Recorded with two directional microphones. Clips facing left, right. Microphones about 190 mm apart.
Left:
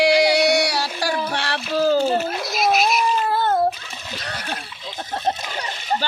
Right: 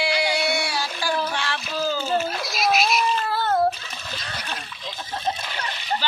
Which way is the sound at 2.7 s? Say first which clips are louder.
Left 1 dB; 50° left (ahead or behind).